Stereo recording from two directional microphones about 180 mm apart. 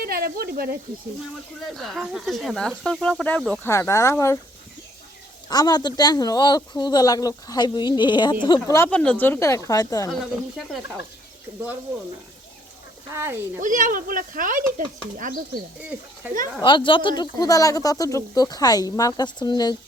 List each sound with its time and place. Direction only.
0.0 s speech: 55° right (ahead or behind)
1.7 s speech: centre (ahead or behind)
3.7 s speech: 15° left (ahead or behind)
5.5 s speech: 20° left (ahead or behind)
8.7 s speech: 10° left (ahead or behind)
10.1 s speech: centre (ahead or behind)
13.1 s speech: 15° right (ahead or behind)
13.6 s speech: 45° right (ahead or behind)
15.8 s speech: 10° right (ahead or behind)
16.6 s speech: 25° left (ahead or behind)